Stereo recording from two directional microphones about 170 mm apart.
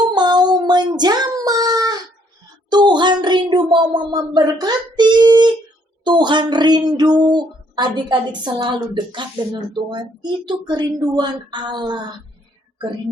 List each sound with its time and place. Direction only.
0.0 s child singing: 25° right (ahead or behind)
2.6 s a sound: 25° right (ahead or behind)
6.1 s speech: 25° right (ahead or behind)